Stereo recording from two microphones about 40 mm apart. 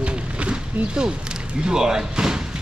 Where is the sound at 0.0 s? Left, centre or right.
Right.